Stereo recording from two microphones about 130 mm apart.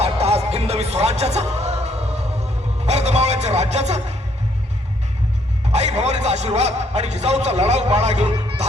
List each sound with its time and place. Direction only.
0.0 s music: 50° right (ahead or behind)
5.7 s a man's voice: 60° right (ahead or behind)